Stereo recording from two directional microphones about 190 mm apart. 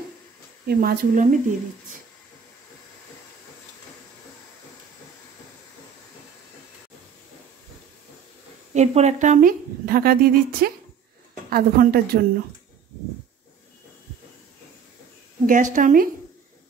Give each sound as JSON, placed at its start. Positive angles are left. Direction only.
{"t": 0.7, "sound": "a woman's voice", "side_deg": -50}
{"t": 8.7, "sound": "a woman's voice", "side_deg": -35}
{"t": 15.4, "sound": "a woman's voice", "side_deg": -45}